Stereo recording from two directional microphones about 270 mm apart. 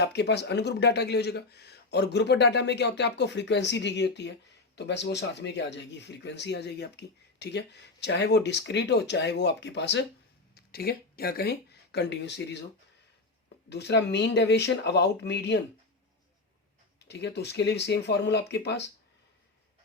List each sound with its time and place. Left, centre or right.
0.0 s speech: left
13.7 s speech: left
17.0 s speech: left